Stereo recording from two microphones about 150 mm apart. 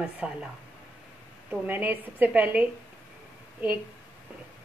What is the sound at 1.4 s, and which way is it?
A woman's voice, 10° right (ahead or behind).